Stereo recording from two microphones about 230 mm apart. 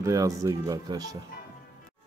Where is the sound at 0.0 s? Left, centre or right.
Centre.